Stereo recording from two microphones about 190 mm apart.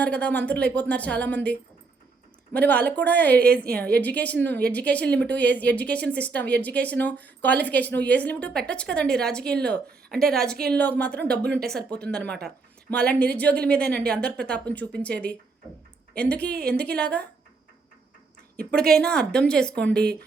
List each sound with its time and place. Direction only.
0.0 s speech: 5° left (ahead or behind)
3.3 s a woman's voice: 55° right (ahead or behind)
3.8 s speech: 10° left (ahead or behind)
13.8 s a woman's voice: 55° right (ahead or behind)
14.7 s speech: 5° left (ahead or behind)
18.7 s speech: 5° left (ahead or behind)